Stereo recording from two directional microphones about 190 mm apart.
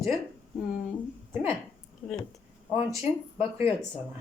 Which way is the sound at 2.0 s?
10° left (ahead or behind).